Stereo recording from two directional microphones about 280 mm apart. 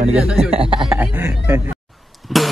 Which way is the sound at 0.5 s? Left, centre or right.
Centre.